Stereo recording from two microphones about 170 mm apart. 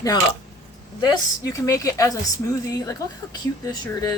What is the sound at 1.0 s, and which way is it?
Speech, 20° left (ahead or behind).